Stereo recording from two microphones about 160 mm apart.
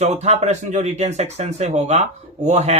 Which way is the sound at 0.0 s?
45° right (ahead or behind).